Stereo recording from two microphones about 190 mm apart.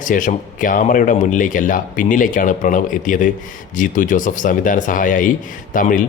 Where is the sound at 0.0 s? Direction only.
40° left (ahead or behind).